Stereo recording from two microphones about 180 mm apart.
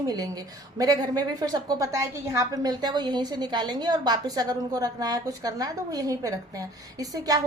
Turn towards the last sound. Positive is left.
turn(degrees=-20)  # may be behind; listen again after turning